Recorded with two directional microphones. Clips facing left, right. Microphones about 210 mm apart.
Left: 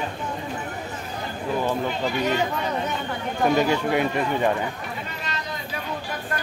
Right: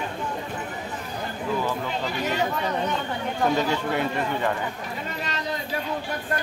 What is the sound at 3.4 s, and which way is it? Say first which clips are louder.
Speech: left 4 dB; 15° left (ahead or behind).